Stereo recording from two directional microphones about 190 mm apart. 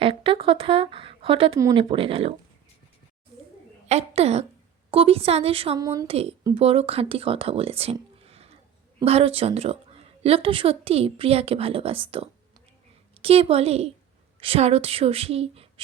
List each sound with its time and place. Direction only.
0.0 s speech: 30° right (ahead or behind)
3.8 s a woman's voice: 35° right (ahead or behind)
5.7 s speech: 20° right (ahead or behind)
6.1 s a woman's voice: 30° right (ahead or behind)
8.2 s a sound: 30° right (ahead or behind)
9.0 s a woman's voice: 30° right (ahead or behind)